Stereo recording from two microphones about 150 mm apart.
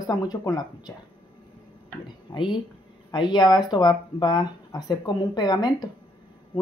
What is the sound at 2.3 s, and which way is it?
Speech, 35° left (ahead or behind).